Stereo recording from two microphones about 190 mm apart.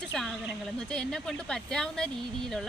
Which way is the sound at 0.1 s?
Centre (ahead or behind).